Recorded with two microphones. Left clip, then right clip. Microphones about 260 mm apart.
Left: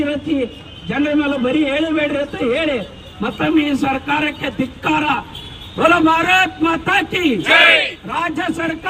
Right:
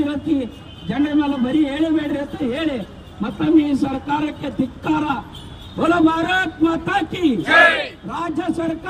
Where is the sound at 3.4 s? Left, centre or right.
Left.